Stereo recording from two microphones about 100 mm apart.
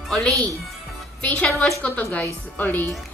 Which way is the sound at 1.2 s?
10° left (ahead or behind).